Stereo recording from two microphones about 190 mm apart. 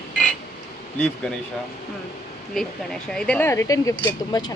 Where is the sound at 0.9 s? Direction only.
5° left (ahead or behind).